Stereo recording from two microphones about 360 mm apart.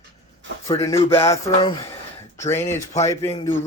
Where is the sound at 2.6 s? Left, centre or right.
Centre.